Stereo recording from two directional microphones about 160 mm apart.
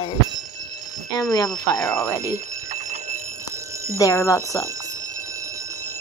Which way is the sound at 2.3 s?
45° right (ahead or behind).